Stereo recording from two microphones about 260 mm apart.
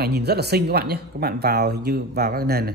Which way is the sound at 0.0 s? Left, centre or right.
Right.